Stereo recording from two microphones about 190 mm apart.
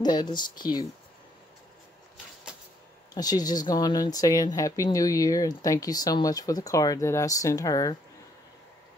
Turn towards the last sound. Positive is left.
turn(degrees=20)  # may be behind; listen again after turning